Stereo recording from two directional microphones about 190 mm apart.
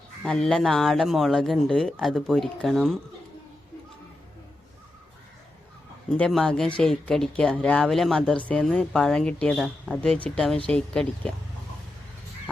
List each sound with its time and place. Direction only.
0.2 s speech: 5° left (ahead or behind)
6.1 s speech: 5° left (ahead or behind)